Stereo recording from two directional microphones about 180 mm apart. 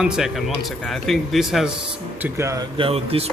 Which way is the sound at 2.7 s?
30° right (ahead or behind).